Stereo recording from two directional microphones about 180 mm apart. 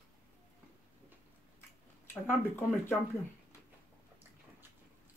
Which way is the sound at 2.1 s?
15° left (ahead or behind).